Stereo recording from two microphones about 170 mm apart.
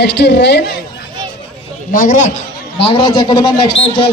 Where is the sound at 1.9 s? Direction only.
50° left (ahead or behind).